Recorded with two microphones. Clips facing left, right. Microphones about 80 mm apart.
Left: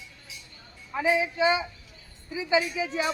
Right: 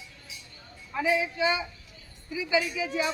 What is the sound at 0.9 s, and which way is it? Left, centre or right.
A man's voice, left.